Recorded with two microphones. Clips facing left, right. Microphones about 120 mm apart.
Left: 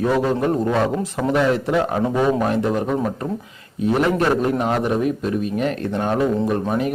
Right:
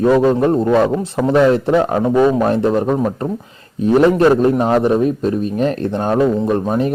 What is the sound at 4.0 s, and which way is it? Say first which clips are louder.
A man's voice: right 8 dB; 35° right (ahead or behind).